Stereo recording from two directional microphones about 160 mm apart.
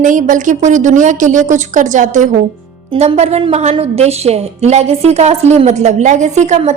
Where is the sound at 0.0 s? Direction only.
55° right (ahead or behind).